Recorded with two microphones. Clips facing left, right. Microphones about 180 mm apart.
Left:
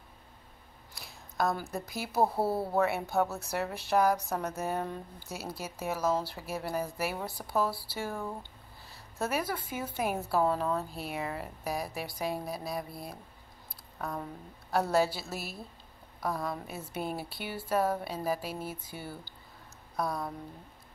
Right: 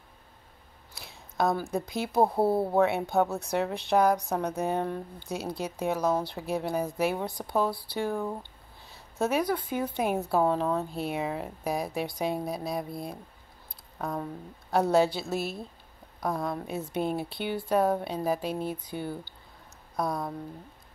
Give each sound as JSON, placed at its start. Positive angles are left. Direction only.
{"t": 0.9, "sound": "a sound", "side_deg": 0}
{"t": 1.7, "sound": "speech", "side_deg": 0}
{"t": 2.2, "sound": "speech", "side_deg": -20}
{"t": 2.8, "sound": "speech", "side_deg": 0}
{"t": 8.2, "sound": "speech", "side_deg": -20}
{"t": 8.8, "sound": "speech", "side_deg": 0}